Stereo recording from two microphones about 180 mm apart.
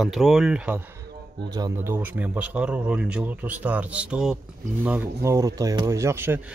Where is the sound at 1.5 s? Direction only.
15° right (ahead or behind).